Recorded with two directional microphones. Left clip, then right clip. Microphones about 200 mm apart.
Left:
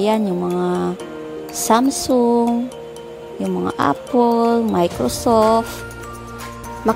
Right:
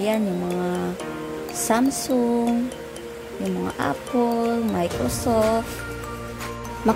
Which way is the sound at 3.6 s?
35° left (ahead or behind).